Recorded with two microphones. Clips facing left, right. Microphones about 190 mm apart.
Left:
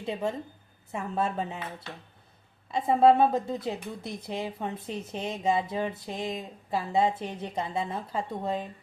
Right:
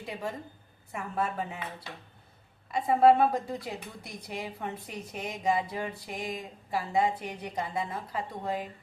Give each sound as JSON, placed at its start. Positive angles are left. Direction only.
{"t": 0.0, "sound": "a woman's voice", "side_deg": 25}
{"t": 2.7, "sound": "a woman's voice", "side_deg": 25}